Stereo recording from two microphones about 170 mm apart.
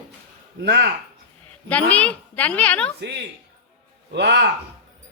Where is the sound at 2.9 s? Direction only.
80° right.